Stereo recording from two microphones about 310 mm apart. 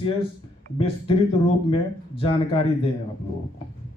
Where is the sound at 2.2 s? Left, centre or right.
Centre.